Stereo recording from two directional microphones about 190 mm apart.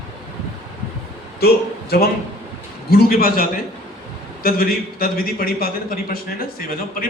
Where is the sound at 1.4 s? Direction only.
55° left (ahead or behind).